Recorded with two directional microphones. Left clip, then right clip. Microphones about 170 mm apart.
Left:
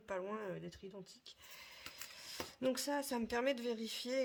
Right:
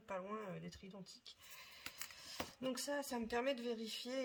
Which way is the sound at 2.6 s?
45° left (ahead or behind).